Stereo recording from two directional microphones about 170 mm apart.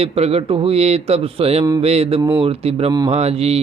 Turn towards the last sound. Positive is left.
turn(degrees=-35)  # may be behind; listen again after turning